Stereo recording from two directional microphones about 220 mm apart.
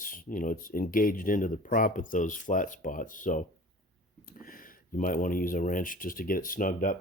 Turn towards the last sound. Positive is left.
turn(degrees=35)  # may be behind; listen again after turning